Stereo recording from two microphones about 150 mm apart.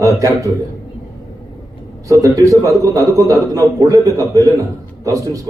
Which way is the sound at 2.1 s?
20° right (ahead or behind).